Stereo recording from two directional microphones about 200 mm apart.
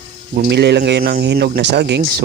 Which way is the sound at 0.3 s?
55° right (ahead or behind).